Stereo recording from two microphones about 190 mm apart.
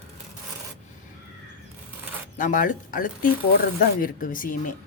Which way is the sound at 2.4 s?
45° left (ahead or behind).